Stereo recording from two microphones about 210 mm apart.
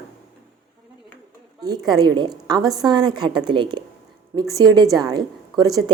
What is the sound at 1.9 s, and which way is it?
A woman's voice, 20° right (ahead or behind).